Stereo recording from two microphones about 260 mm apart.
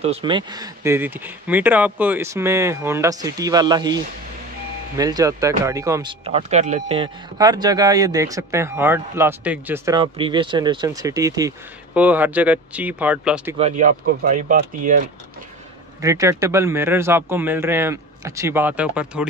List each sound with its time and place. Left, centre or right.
0.0 s speech: right
6.2 s speech: right; by 13.6 s centre
13.6 s speech: right
16.0 s speech: centre